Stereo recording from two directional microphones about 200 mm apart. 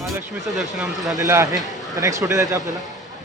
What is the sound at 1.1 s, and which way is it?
Speech, 15° right (ahead or behind).